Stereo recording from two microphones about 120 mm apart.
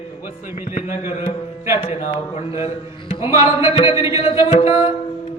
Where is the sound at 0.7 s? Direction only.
90° left.